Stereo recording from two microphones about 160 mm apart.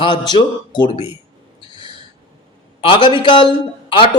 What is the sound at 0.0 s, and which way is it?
A man's voice, 30° left (ahead or behind).